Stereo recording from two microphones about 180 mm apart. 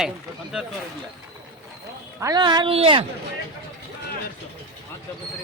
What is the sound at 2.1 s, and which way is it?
Speech, 20° right (ahead or behind).